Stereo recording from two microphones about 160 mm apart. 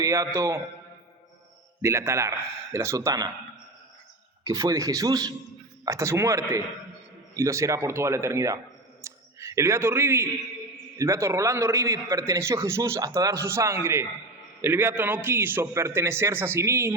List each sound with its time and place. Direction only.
0.0 s a man's voice: 20° right (ahead or behind)
1.8 s a man's voice: 15° right (ahead or behind)
4.4 s a man's voice: 20° right (ahead or behind)
9.0 s a sound: 20° right (ahead or behind)
10.9 s a man's voice: 20° right (ahead or behind)